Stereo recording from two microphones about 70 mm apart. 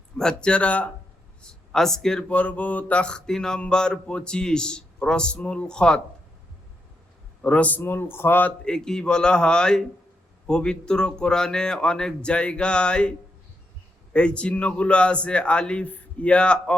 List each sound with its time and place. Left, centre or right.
0.2 s speech: centre
2.3 s speech: left
7.4 s a man's voice: centre
7.8 s speech: left
8.6 s speech: centre